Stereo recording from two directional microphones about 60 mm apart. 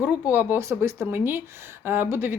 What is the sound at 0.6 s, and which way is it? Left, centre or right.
Speech, right.